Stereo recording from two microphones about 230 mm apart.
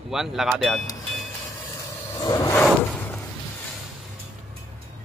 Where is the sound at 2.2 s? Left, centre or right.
Centre.